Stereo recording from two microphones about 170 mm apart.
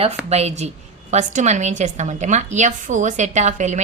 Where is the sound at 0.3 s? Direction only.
40° right (ahead or behind).